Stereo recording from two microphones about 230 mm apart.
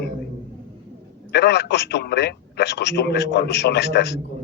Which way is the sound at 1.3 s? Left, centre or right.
Left.